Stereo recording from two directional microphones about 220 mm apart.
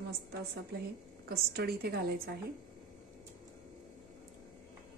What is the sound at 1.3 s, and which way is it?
A woman's voice, 45° right (ahead or behind).